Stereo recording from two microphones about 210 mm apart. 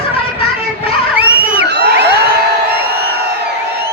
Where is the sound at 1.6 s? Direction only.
55° right (ahead or behind).